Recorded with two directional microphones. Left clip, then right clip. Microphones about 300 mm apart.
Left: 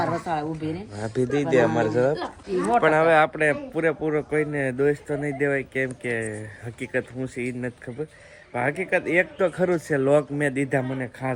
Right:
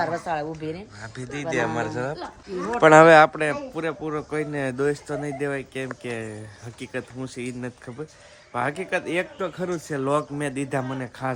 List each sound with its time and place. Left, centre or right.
0.3 s speech: right
1.0 s speech: centre
2.8 s speech: right
3.3 s speech: centre